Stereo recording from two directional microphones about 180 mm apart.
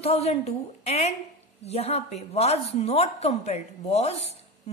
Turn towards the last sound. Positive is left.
turn(degrees=35)  # may be behind; listen again after turning